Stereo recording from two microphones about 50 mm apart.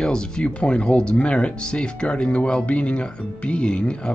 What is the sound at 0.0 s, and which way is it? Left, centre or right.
Speech, centre.